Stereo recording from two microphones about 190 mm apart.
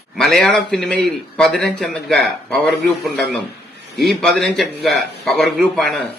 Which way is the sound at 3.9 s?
Centre (ahead or behind).